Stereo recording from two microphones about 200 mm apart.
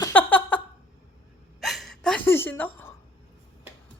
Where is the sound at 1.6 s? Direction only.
Centre (ahead or behind).